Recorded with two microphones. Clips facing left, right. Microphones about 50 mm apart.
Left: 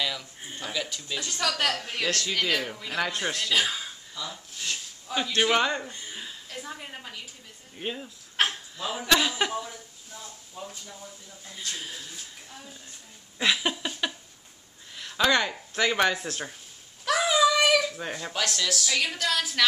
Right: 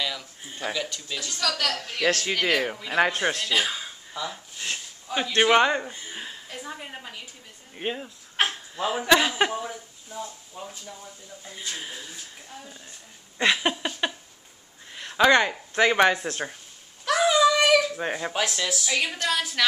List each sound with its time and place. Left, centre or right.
0.0 s a sound: centre
0.7 s speech: centre
1.4 s a woman's voice: centre
2.0 s a man's voice: right
3.3 s a man's voice: centre
4.1 s a man's voice: right
6.5 s a man's voice: centre
7.7 s a man's voice: centre
8.4 s a sound: centre
8.8 s a man's voice: centre
13.4 s a sound: centre
15.5 s a man's voice: centre
17.0 s a sound: centre
17.9 s a man's voice: right